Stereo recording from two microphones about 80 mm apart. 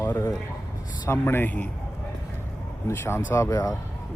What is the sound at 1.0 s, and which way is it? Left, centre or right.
Speech, left.